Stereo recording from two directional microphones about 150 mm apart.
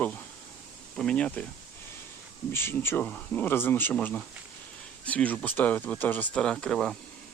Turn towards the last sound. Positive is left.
turn(degrees=5)  # may be behind; listen again after turning